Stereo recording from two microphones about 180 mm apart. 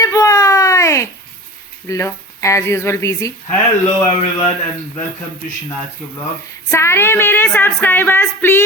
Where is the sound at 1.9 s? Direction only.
15° left (ahead or behind).